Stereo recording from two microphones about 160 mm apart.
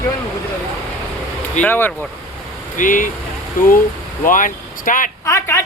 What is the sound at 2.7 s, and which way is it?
Speech, 55° left (ahead or behind).